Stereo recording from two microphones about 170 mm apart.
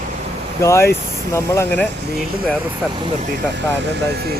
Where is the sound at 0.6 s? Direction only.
15° left (ahead or behind).